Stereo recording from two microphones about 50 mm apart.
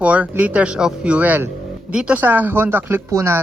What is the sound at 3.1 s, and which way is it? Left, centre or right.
Speech, right.